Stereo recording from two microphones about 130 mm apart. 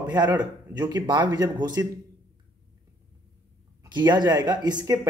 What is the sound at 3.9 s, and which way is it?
Speech, 35° right (ahead or behind).